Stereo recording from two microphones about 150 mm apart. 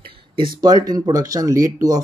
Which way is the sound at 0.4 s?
30° right (ahead or behind).